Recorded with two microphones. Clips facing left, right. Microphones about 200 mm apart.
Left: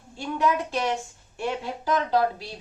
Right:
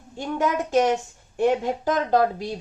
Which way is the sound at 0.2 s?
45° right (ahead or behind).